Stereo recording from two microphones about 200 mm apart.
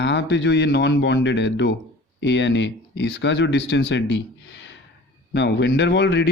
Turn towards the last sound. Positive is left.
turn(degrees=60)  # may be behind; listen again after turning